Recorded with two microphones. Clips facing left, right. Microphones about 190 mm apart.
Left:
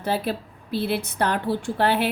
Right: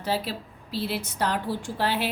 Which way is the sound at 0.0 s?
55° left (ahead or behind).